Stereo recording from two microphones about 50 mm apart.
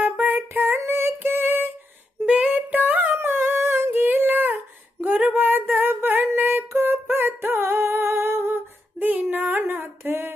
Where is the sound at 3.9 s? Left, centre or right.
Right.